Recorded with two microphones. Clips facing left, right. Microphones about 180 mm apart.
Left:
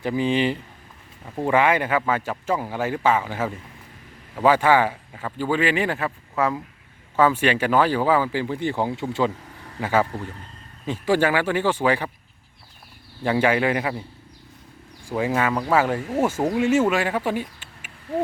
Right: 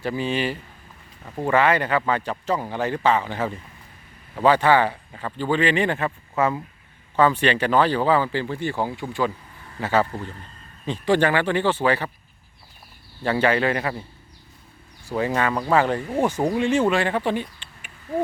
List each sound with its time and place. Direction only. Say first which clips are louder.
0.0 s speech: left 3 dB; 15° left (ahead or behind)
9.8 s speech: even; 10° left (ahead or behind)
13.2 s speech: even; 10° left (ahead or behind)
15.0 s speech: even; 10° left (ahead or behind)